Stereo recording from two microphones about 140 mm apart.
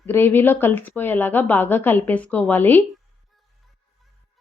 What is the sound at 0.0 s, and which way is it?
Speech, 15° left (ahead or behind).